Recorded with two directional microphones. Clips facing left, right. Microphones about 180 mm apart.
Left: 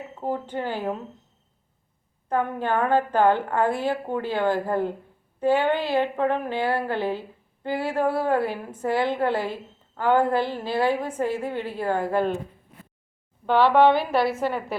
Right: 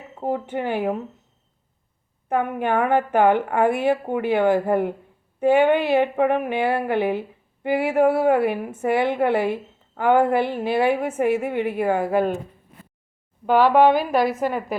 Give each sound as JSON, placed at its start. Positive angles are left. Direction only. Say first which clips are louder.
{"t": 0.2, "sound": "speech", "louder": "right 3 dB", "side_deg": -15}
{"t": 2.3, "sound": "a woman's voice", "louder": "right 3 dB", "side_deg": -20}
{"t": 13.4, "sound": "a woman's voice", "louder": "right 2 dB", "side_deg": -15}